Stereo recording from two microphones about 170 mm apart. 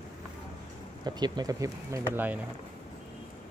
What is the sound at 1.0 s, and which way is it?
Speech, 25° right (ahead or behind).